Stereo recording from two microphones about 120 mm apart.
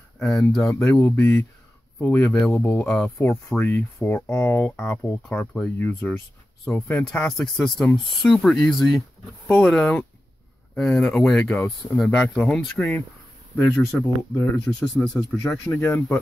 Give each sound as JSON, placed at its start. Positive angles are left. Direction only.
{"t": 0.2, "sound": "speech", "side_deg": 0}
{"t": 1.0, "sound": "speech", "side_deg": 15}
{"t": 12.2, "sound": "speech", "side_deg": 5}
{"t": 13.9, "sound": "speech", "side_deg": 25}
{"t": 14.5, "sound": "speech", "side_deg": 10}